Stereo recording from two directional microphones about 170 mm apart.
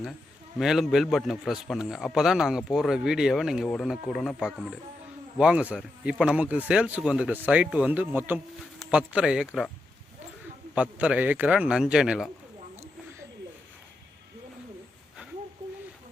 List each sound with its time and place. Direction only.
0.6 s a man's voice: centre (ahead or behind)
10.8 s speech: 5° right (ahead or behind)
12.7 s a sound: 15° right (ahead or behind)